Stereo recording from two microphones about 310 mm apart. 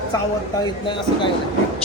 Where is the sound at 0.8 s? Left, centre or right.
Centre.